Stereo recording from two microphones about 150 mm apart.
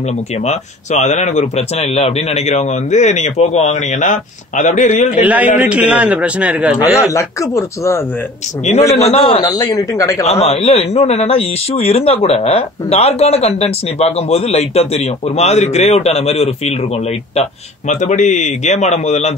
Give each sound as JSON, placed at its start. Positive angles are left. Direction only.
{"t": 0.5, "sound": "a man's voice", "side_deg": 50}
{"t": 5.2, "sound": "a man's voice", "side_deg": -10}
{"t": 7.0, "sound": "speech", "side_deg": 20}
{"t": 8.9, "sound": "a man's voice", "side_deg": 45}
{"t": 9.4, "sound": "speech", "side_deg": 25}
{"t": 10.2, "sound": "a man's voice", "side_deg": 45}